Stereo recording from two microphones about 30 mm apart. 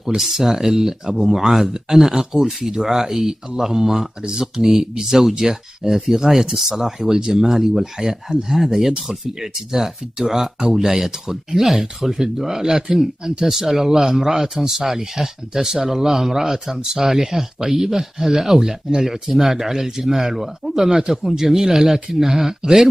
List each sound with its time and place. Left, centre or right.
0.2 s speech: centre
4.2 s speech: right
5.0 s speech: centre
7.4 s speech: centre
8.5 s speech: centre